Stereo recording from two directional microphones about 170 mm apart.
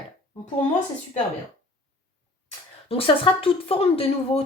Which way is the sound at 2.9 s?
30° left (ahead or behind).